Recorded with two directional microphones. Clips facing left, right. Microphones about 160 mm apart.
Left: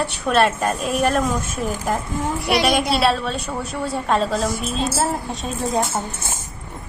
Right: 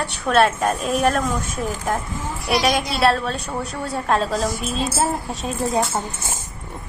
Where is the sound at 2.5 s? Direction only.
65° left (ahead or behind).